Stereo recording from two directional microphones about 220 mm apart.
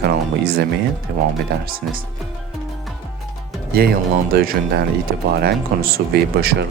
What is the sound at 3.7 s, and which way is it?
Speech, 45° right (ahead or behind).